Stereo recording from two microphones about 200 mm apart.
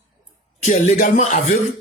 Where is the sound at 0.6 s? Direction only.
35° left (ahead or behind).